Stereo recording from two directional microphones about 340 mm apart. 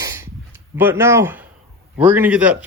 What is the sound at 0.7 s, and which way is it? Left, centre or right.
A man's voice, centre.